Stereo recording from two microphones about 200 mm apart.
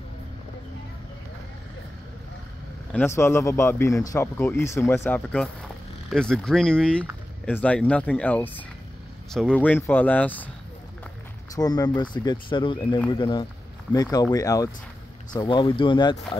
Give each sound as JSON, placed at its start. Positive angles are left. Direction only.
{"t": 2.9, "sound": "speech", "side_deg": 10}
{"t": 11.5, "sound": "speech", "side_deg": 20}